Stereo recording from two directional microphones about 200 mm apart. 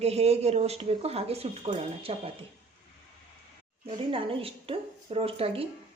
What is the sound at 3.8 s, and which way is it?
A woman's voice, 25° right (ahead or behind).